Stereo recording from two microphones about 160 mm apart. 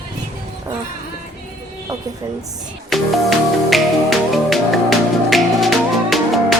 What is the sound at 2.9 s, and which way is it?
Music, centre (ahead or behind).